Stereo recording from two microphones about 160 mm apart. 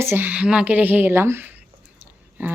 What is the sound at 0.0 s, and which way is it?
Speech, 15° right (ahead or behind).